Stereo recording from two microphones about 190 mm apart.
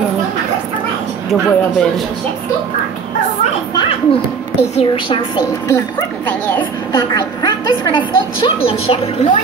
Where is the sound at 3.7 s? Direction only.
30° left (ahead or behind).